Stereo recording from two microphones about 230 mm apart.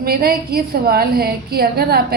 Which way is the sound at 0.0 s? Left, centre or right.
Right.